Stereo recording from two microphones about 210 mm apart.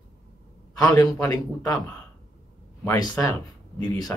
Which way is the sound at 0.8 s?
15° left (ahead or behind).